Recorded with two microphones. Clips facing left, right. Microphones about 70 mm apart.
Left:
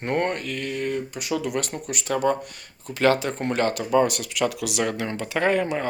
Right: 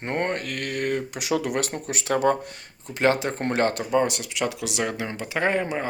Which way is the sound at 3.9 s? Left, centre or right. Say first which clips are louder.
Left 2 dB; right.